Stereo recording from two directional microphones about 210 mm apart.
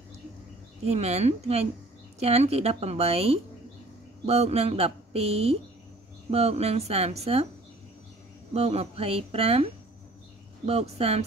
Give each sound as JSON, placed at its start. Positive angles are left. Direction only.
{"t": 0.8, "sound": "a woman's voice", "side_deg": -30}
{"t": 8.5, "sound": "speech", "side_deg": -30}